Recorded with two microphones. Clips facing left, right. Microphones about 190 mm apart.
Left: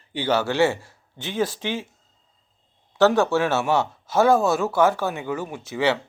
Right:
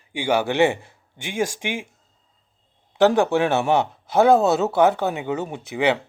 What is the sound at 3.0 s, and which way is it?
A man's voice, 15° right (ahead or behind).